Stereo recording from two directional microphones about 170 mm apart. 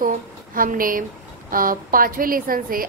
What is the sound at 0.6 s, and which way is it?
A woman's voice, 55° right (ahead or behind).